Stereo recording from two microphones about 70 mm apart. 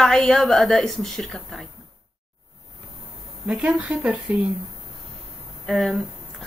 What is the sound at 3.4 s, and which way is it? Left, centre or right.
Speech, centre.